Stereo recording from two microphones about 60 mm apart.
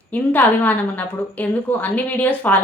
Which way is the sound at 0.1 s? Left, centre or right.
Left.